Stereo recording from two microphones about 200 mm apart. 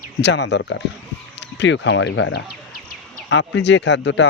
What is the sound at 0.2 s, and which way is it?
Speech, 60° left (ahead or behind).